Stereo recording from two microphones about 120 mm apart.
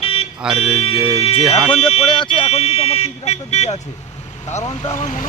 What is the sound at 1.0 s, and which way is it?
Speech, 55° left (ahead or behind).